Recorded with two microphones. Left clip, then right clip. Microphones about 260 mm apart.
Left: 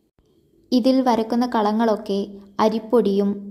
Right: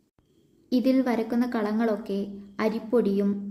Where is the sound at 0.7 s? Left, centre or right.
Left.